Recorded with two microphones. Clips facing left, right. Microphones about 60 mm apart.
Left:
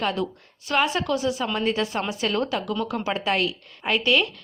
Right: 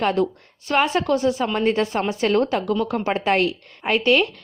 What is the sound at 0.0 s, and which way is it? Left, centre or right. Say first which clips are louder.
Speech: right 5 dB; right.